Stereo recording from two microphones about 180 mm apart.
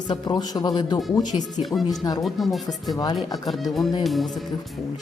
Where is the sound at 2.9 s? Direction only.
20° left (ahead or behind).